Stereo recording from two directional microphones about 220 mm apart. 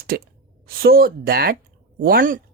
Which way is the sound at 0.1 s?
50° right (ahead or behind).